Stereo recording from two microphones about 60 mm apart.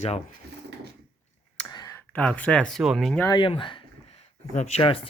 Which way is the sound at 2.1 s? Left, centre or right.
Left.